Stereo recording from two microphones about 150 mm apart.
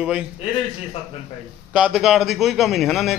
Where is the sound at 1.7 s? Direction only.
5° right (ahead or behind).